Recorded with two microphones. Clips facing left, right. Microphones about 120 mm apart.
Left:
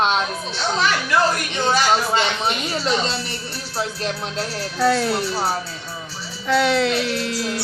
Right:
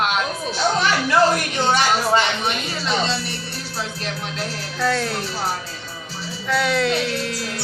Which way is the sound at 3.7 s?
35° left (ahead or behind).